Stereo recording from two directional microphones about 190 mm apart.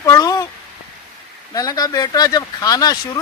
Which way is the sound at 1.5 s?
20° left (ahead or behind).